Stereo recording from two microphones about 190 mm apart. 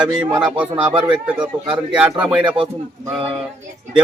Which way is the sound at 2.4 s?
25° right (ahead or behind).